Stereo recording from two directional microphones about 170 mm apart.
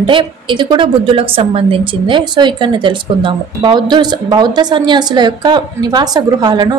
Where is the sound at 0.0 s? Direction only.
30° right (ahead or behind).